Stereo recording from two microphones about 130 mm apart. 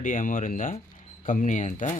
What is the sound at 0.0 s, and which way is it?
Speech, 90° left.